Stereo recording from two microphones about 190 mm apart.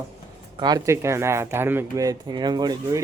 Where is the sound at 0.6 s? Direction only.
20° right (ahead or behind).